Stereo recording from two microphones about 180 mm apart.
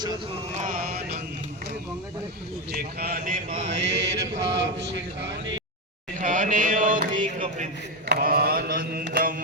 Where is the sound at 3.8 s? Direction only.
80° right.